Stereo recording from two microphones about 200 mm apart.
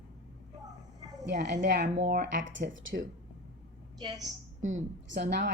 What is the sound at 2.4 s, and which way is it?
Speech, 70° right (ahead or behind).